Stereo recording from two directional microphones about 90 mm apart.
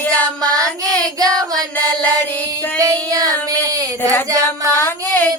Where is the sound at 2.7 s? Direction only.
40° right (ahead or behind).